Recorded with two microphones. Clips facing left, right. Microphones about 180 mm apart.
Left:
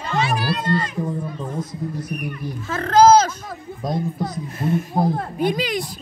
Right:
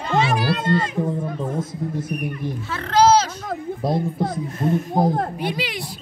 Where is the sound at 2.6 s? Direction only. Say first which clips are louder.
Left 3 dB; 45° left (ahead or behind).